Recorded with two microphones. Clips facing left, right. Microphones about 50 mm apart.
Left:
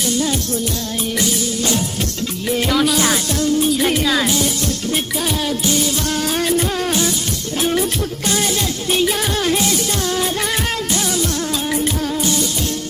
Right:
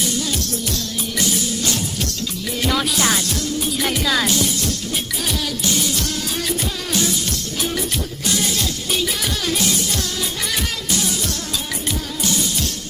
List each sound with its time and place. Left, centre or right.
2.6 s music: centre
4.0 s music: centre
8.9 s music: left